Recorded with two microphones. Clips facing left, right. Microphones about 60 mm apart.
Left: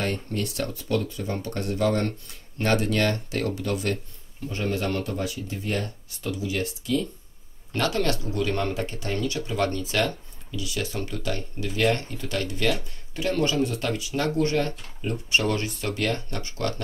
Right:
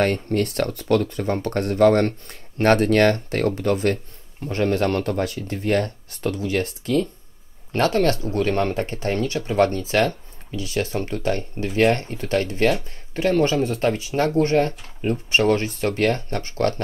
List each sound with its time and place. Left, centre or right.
0.0 s speech: right
4.5 s speech: right
7.7 s speech: right